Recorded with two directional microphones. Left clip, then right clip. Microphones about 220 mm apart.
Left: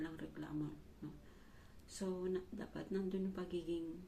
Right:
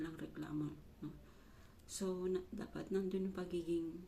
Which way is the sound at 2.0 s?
25° right (ahead or behind).